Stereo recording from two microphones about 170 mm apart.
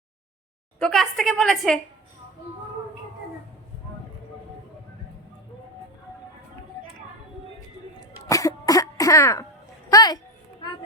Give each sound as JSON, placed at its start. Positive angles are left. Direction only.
{"t": 0.8, "sound": "a woman's voice", "side_deg": 5}
{"t": 8.3, "sound": "music", "side_deg": 20}
{"t": 9.9, "sound": "a sound", "side_deg": 20}